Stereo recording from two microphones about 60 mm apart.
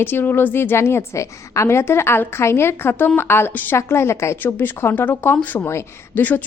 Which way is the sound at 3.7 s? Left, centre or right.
Left.